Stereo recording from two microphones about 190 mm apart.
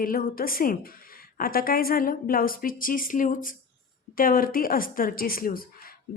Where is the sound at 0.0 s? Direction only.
50° left (ahead or behind).